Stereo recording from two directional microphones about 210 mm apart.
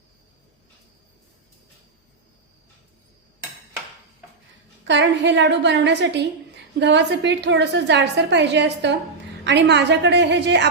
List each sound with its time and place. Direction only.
4.9 s a woman's voice: 55° right (ahead or behind)